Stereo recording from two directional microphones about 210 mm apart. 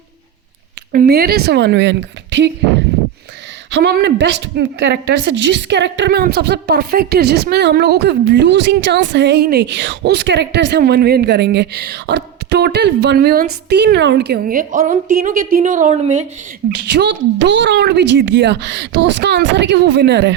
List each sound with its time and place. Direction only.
0.9 s a woman's voice: 50° right (ahead or behind)
3.7 s a woman's voice: 50° right (ahead or behind); by 16.2 s 35° right (ahead or behind)
16.6 s a woman's voice: 55° right (ahead or behind)